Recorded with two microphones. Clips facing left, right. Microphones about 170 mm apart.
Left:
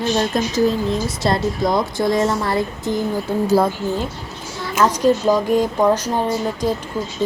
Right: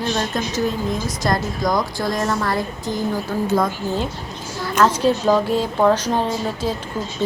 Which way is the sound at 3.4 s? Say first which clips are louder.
Left 4 dB; 35° left (ahead or behind).